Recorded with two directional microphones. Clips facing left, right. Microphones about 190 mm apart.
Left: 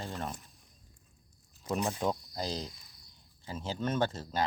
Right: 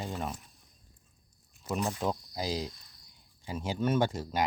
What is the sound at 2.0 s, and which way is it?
Speech, 5° right (ahead or behind).